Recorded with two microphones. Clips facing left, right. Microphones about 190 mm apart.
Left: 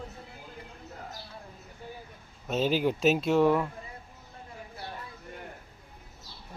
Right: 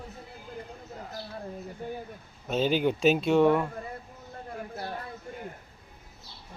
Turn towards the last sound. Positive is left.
turn(degrees=-55)  # may be behind; listen again after turning